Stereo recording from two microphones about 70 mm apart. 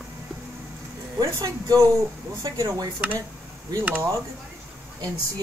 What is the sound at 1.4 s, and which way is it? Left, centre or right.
Speech, right.